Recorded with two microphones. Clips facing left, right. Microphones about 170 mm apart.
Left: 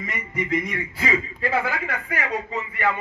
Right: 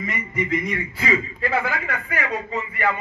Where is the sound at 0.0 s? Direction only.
40° left (ahead or behind).